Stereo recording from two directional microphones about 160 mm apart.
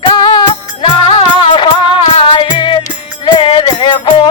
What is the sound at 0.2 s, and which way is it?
Music, 30° left (ahead or behind).